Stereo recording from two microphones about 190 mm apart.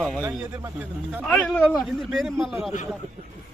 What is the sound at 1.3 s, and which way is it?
Speech, 5° left (ahead or behind).